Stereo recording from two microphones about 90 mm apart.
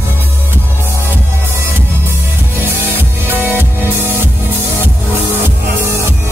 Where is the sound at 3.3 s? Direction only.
20° right (ahead or behind).